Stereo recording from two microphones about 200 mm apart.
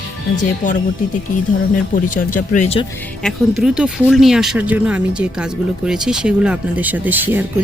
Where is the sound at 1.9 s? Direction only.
40° left (ahead or behind).